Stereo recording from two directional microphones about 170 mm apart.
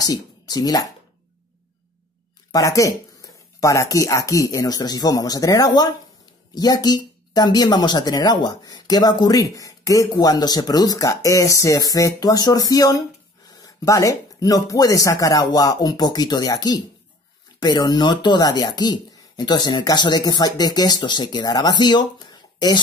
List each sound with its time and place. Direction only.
0.0 s speech: 25° left (ahead or behind)
2.5 s speech: 20° left (ahead or behind)